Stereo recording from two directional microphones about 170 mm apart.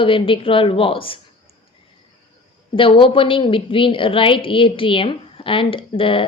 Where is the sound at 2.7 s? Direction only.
30° left (ahead or behind).